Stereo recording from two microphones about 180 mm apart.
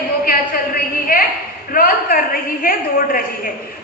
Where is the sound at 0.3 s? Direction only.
55° left (ahead or behind).